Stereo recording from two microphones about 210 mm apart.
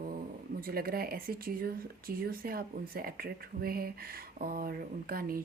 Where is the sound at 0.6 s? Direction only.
45° right (ahead or behind).